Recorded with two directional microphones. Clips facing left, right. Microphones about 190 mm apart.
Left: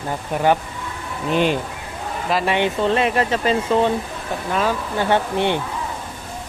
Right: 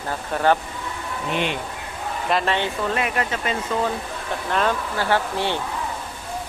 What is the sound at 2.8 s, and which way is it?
Speech, 30° left (ahead or behind).